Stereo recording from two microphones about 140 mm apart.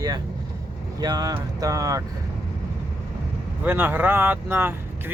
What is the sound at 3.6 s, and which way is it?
Speech, 15° right (ahead or behind).